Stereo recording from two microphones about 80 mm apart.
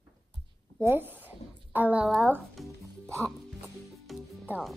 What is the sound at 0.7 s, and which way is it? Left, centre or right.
A woman's voice, right.